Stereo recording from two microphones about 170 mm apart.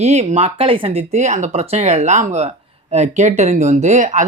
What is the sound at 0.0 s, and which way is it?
Speech, 40° right (ahead or behind).